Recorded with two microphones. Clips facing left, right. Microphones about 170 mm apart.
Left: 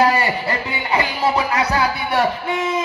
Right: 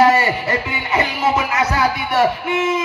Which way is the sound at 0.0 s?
35° left (ahead or behind).